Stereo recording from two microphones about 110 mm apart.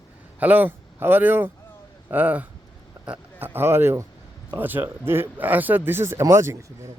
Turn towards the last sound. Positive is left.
turn(degrees=-25)  # may be behind; listen again after turning